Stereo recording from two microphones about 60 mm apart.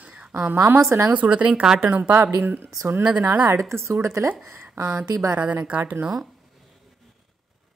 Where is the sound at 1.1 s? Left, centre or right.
Right.